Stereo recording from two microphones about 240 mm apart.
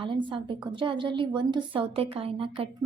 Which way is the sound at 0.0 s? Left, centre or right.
Right.